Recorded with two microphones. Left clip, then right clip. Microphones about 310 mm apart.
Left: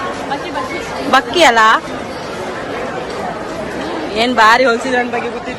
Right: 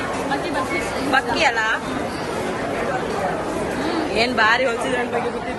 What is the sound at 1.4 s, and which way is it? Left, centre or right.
Speech, centre.